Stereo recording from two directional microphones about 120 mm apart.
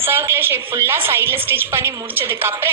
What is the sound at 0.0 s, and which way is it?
A woman's voice, 20° right (ahead or behind).